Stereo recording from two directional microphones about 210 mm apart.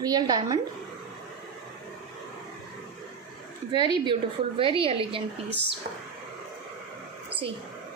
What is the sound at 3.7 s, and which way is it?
A woman's voice, 20° right (ahead or behind).